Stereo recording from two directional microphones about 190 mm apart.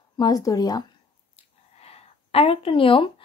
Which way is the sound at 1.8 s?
30° left (ahead or behind).